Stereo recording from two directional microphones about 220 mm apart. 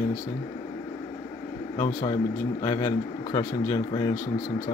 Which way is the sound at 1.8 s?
15° left (ahead or behind).